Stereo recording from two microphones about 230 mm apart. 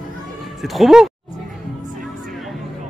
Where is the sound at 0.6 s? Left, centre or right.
Centre.